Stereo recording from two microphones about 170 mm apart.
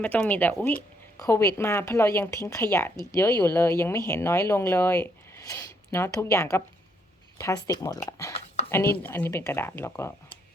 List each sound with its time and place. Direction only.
0.0 s speech: 10° left (ahead or behind)